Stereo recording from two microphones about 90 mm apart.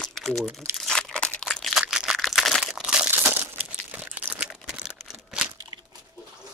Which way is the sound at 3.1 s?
25° right (ahead or behind).